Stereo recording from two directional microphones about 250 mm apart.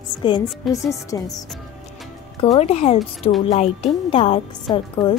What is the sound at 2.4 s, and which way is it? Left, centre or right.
A woman's voice, left.